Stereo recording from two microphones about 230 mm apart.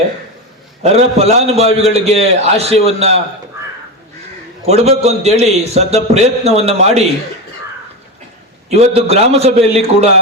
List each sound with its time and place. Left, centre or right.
0.8 s a man's voice: right
4.6 s a man's voice: right
8.7 s a man's voice: right